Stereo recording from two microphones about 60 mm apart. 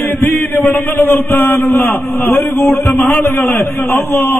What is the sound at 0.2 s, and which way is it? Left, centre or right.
A man's voice, left.